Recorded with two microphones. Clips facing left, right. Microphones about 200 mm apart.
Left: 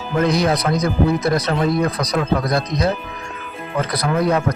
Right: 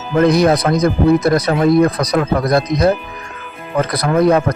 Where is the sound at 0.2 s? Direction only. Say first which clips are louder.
Right 6 dB; 50° right (ahead or behind).